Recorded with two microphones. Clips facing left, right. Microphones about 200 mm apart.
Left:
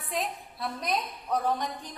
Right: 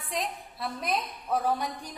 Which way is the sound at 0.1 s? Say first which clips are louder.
Left 1 dB; centre (ahead or behind).